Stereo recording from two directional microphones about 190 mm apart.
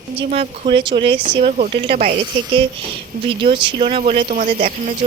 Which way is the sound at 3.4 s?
25° right (ahead or behind).